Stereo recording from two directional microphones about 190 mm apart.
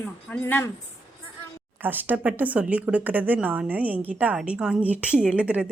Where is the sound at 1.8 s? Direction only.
10° right (ahead or behind).